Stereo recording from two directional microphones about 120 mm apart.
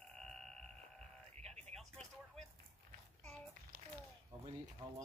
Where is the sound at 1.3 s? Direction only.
65° right (ahead or behind).